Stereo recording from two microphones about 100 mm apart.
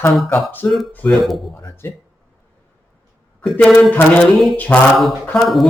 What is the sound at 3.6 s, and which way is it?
Mantra, 5° left (ahead or behind).